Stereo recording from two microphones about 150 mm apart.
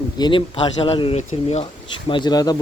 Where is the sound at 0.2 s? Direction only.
35° left (ahead or behind).